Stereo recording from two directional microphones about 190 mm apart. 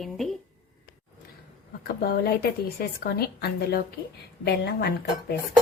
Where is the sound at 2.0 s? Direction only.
55° left (ahead or behind).